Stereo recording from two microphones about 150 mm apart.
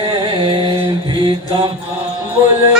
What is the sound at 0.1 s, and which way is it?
Mantra, 35° right (ahead or behind).